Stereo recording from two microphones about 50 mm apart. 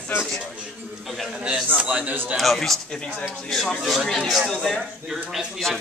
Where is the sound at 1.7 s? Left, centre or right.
Right.